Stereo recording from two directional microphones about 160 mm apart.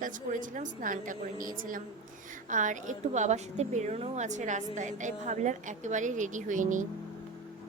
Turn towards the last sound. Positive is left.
turn(degrees=-55)  # may be behind; listen again after turning